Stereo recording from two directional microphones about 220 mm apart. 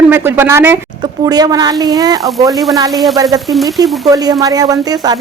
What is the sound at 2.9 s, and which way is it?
Speech, centre (ahead or behind).